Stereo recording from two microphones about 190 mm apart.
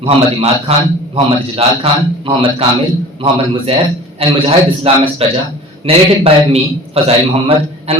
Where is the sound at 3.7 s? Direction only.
30° right (ahead or behind).